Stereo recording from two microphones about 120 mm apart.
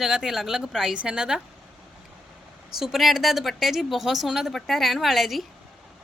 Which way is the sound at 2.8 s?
Centre (ahead or behind).